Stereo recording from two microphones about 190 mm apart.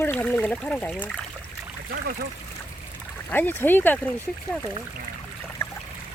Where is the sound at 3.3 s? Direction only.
10° left (ahead or behind).